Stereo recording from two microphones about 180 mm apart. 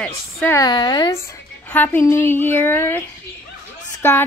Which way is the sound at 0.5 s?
25° left (ahead or behind).